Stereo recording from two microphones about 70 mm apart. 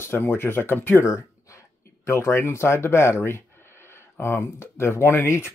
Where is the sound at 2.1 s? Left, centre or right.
Left.